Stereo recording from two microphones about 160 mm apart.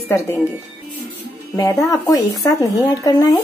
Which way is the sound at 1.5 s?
20° left (ahead or behind).